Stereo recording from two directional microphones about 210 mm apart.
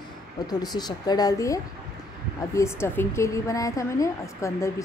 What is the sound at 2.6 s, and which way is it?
A woman's voice, 10° left (ahead or behind).